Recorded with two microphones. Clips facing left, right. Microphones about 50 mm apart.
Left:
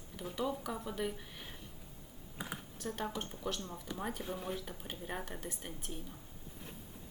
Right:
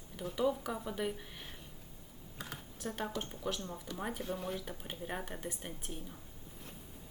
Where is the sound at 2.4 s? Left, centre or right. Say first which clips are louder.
Left 3 dB; centre.